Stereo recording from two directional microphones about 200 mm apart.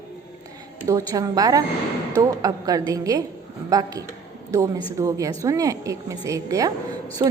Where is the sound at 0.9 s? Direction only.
15° right (ahead or behind).